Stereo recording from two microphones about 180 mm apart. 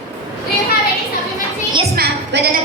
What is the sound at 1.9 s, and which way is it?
Music, 60° right (ahead or behind).